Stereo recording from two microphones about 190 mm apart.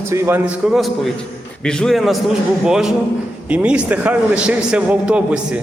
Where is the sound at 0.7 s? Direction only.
Centre (ahead or behind).